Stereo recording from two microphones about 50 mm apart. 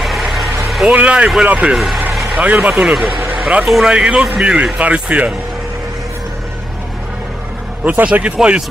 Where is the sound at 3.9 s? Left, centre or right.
Right.